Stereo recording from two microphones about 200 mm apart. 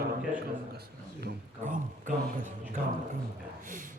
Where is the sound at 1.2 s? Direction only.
40° right (ahead or behind).